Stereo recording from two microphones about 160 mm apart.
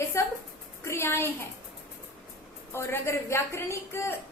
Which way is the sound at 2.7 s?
15° left (ahead or behind).